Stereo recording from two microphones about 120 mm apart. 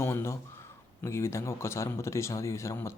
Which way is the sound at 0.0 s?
20° left (ahead or behind).